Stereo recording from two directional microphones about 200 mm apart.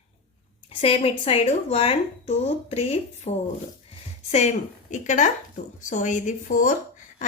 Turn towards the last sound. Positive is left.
turn(degrees=40)  # may be behind; listen again after turning